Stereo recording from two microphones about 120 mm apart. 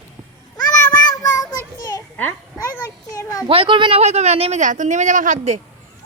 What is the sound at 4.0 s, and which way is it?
A woman's voice, 65° right (ahead or behind).